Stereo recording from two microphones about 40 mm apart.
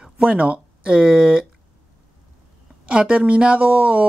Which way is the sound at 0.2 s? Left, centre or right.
Right.